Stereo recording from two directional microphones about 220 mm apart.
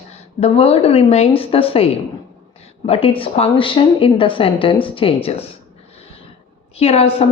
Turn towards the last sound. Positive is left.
turn(degrees=25)  # may be behind; listen again after turning